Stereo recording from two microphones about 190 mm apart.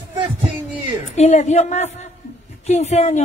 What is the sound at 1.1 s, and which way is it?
A man's voice, 40° left (ahead or behind).